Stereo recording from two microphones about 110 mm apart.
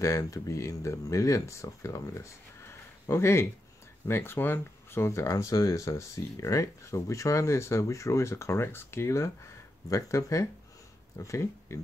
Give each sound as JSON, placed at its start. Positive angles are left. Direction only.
{"t": 0.0, "sound": "speech", "side_deg": 25}